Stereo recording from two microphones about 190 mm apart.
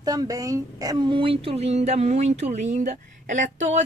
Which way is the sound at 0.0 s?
20° right (ahead or behind).